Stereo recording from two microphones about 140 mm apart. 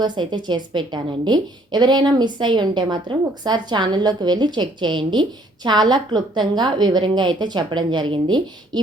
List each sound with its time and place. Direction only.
0.0 s a woman's voice: 30° right (ahead or behind)